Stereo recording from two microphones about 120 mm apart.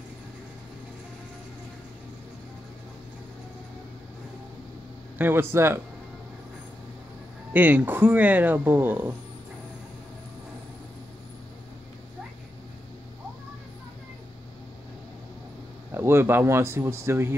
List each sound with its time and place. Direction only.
5.1 s speech: 20° right (ahead or behind)
7.5 s speech: 15° right (ahead or behind)
15.9 s speech: 20° right (ahead or behind)